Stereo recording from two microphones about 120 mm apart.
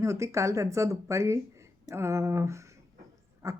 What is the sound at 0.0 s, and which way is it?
Speech, 25° right (ahead or behind).